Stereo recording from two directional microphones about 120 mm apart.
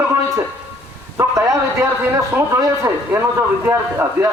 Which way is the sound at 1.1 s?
25° right (ahead or behind).